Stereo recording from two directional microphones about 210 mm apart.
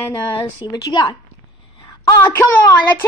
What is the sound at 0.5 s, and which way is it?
Speech, 20° left (ahead or behind).